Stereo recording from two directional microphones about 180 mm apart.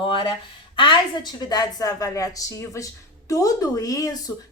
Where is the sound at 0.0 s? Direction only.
25° left (ahead or behind).